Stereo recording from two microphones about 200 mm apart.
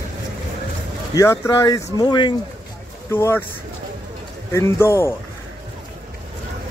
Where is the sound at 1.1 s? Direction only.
15° left (ahead or behind).